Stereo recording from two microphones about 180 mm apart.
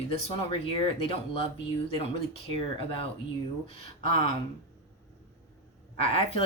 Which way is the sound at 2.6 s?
30° left (ahead or behind).